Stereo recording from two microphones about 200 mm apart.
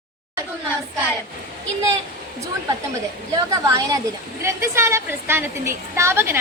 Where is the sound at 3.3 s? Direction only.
20° right (ahead or behind).